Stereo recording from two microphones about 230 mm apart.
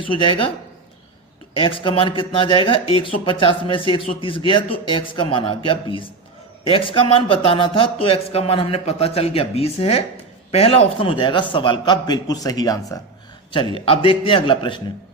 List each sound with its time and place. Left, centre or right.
0.1 s speech: left
1.5 s speech: left